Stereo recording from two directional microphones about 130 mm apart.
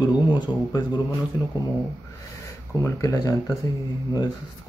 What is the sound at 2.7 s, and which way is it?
Speech, 25° left (ahead or behind).